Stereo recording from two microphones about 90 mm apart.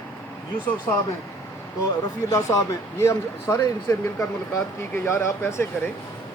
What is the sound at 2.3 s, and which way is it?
Speech, 40° left (ahead or behind).